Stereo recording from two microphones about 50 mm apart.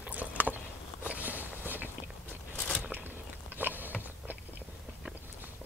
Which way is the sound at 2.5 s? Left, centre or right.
Centre.